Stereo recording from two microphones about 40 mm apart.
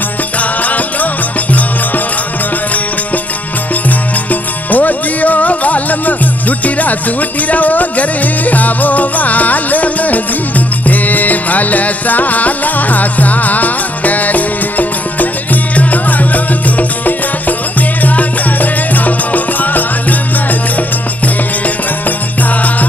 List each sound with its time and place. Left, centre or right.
0.4 s music: left
4.3 s music: left